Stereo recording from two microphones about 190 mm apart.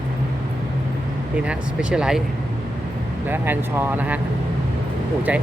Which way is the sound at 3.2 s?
10° right (ahead or behind).